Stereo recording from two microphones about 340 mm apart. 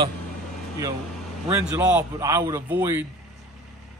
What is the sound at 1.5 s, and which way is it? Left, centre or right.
Speech, centre.